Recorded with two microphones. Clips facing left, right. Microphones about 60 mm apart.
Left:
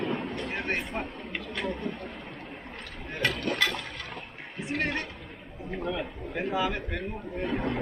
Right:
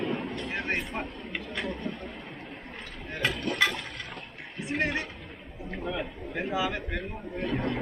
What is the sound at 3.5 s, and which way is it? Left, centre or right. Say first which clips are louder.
Toilet flush: right 1 dB; centre.